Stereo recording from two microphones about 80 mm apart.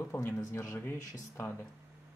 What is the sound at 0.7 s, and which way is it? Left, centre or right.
Speech, left.